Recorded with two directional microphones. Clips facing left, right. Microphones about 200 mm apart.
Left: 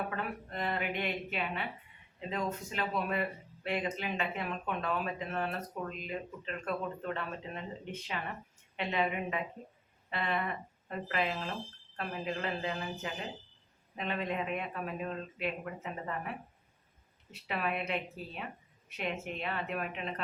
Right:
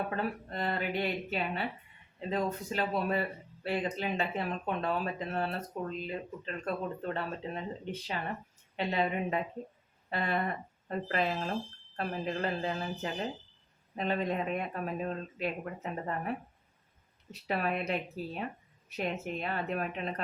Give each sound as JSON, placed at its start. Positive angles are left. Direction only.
{"t": 0.2, "sound": "speech", "side_deg": -35}
{"t": 17.4, "sound": "speech", "side_deg": -40}